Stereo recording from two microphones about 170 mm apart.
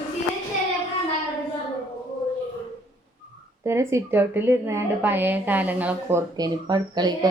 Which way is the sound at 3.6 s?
15° right (ahead or behind).